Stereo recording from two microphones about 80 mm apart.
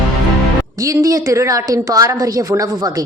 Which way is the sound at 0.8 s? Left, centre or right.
Right.